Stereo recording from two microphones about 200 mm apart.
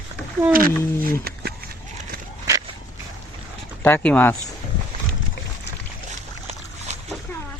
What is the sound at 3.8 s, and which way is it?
Speech, 10° left (ahead or behind).